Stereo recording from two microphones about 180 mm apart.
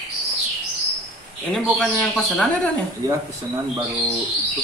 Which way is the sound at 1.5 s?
5° left (ahead or behind).